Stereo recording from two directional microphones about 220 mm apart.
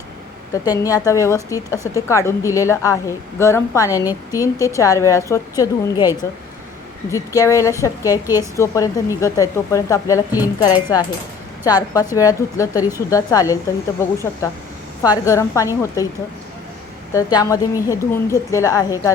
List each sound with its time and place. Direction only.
0.5 s a woman's voice: 15° left (ahead or behind)
7.1 s a woman's voice: 15° left (ahead or behind)
17.2 s a woman's voice: 15° left (ahead or behind)